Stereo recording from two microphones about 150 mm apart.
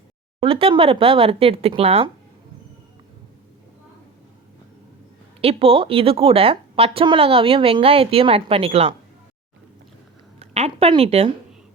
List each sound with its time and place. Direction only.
0.3 s speech: 40° right (ahead or behind)
5.4 s speech: 40° right (ahead or behind)
10.4 s speech: 45° right (ahead or behind)